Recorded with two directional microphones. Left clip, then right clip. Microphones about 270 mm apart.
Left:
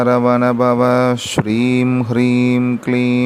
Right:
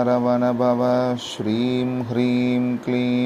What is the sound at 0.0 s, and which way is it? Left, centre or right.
Mantra, left.